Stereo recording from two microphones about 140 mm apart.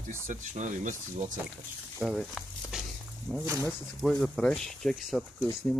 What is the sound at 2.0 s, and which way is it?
Speech, centre (ahead or behind).